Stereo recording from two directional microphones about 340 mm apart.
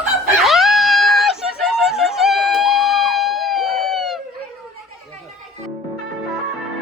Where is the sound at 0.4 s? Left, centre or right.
Centre.